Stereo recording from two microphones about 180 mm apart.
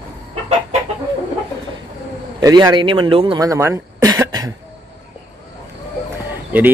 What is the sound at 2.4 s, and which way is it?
Speech, 20° right (ahead or behind).